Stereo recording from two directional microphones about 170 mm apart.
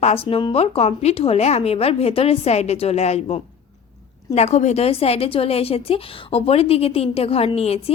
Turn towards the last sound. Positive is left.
turn(degrees=35)  # may be behind; listen again after turning